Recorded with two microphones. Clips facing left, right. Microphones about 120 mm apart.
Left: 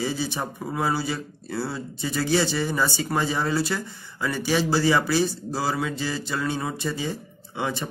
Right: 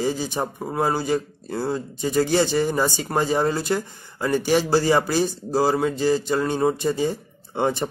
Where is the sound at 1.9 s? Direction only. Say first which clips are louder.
Right 3 dB; 45° right (ahead or behind).